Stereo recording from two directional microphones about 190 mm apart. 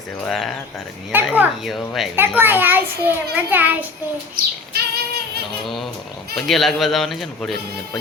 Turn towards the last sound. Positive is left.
turn(degrees=0)  # may be behind; listen again after turning